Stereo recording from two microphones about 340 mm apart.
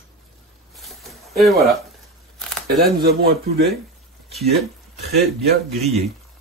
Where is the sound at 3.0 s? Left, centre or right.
Right.